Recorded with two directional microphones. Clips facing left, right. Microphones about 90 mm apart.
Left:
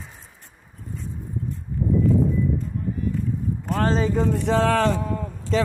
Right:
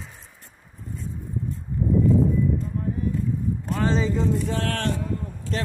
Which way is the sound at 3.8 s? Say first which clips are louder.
Left 2 dB; 50° left (ahead or behind).